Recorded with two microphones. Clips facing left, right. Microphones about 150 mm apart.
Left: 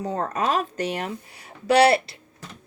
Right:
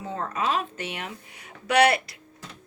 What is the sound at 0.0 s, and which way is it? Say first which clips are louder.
A woman's voice: left 4 dB; 40° left (ahead or behind).